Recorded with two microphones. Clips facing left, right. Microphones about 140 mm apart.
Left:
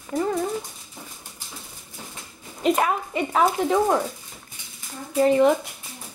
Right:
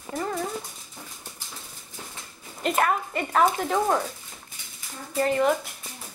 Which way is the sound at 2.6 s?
Centre (ahead or behind).